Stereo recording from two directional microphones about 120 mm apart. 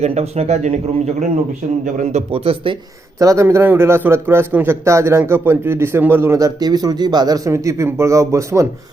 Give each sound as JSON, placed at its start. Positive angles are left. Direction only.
{"t": 0.0, "sound": "speech", "side_deg": -60}
{"t": 1.8, "sound": "speech", "side_deg": -90}
{"t": 2.3, "sound": "speech", "side_deg": -55}
{"t": 3.2, "sound": "a man's voice", "side_deg": -25}